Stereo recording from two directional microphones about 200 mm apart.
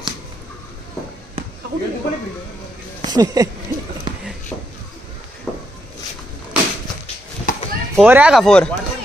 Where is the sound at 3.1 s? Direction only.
20° right (ahead or behind).